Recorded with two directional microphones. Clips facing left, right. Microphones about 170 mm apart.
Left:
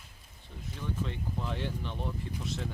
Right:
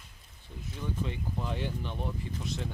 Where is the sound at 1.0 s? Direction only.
5° right (ahead or behind).